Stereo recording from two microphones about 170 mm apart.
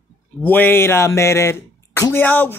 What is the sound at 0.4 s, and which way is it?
Speech, 10° left (ahead or behind).